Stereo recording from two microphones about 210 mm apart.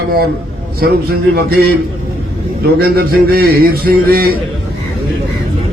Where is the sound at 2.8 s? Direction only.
45° right (ahead or behind).